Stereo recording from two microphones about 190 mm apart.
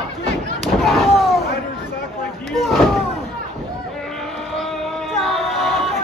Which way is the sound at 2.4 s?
Centre (ahead or behind).